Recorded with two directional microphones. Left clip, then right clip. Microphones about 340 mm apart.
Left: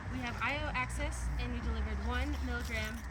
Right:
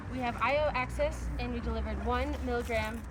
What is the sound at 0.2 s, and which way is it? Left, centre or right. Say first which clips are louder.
Speech: right 8 dB; right.